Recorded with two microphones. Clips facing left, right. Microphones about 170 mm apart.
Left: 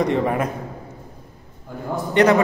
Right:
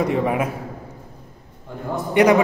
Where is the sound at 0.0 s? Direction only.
5° right (ahead or behind).